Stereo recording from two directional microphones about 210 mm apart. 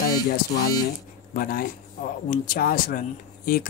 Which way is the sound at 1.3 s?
45° left (ahead or behind).